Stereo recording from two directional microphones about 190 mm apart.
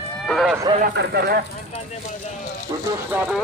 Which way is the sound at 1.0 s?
55° right (ahead or behind).